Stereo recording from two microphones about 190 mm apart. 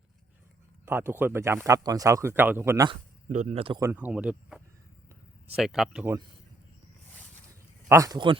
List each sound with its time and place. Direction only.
0.9 s speech: 10° right (ahead or behind)
3.2 s speech: 40° right (ahead or behind)
3.8 s speech: 10° right (ahead or behind)
7.9 s speech: 15° right (ahead or behind)